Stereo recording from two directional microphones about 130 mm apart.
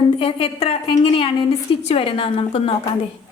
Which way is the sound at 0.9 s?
35° left (ahead or behind).